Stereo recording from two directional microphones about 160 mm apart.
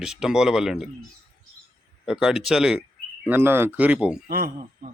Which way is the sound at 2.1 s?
5° right (ahead or behind).